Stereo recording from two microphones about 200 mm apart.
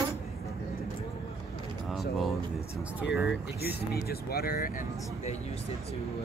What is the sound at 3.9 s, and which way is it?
Speech, 50° left (ahead or behind).